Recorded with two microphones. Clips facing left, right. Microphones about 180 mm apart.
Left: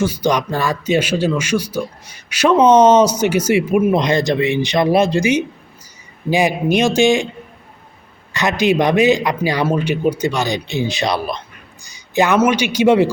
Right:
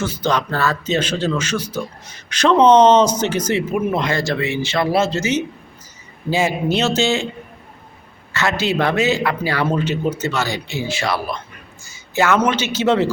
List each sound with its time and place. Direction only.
0.0 s a man's voice: 10° left (ahead or behind)
8.3 s a man's voice: 15° left (ahead or behind)